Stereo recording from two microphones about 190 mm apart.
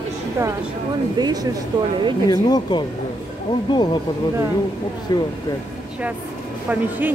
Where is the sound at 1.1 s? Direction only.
20° right (ahead or behind).